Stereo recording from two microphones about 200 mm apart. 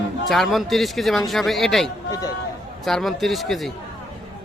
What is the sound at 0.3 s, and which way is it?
Speech, centre (ahead or behind).